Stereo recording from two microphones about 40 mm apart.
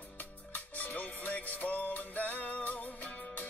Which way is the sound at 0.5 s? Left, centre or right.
Left.